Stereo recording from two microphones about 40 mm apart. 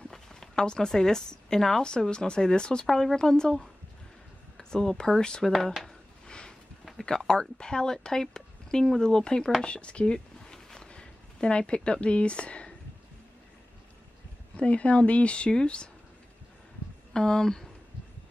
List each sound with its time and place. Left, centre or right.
0.1 s speech: centre
2.9 s speech: centre
4.6 s speech: centre
6.2 s a sound: left
7.2 s speech: centre
14.6 s speech: left
17.1 s speech: centre